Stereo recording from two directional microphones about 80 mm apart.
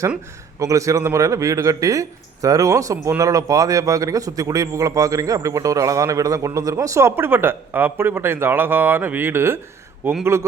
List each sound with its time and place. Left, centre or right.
0.6 s speech: right
7.2 s speech: right